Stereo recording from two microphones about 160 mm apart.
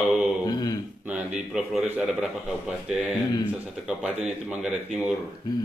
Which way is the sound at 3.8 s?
5° right (ahead or behind).